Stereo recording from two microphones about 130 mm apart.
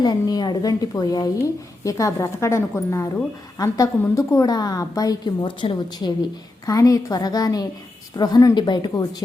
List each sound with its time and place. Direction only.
0.0 s a woman's voice: 30° left (ahead or behind)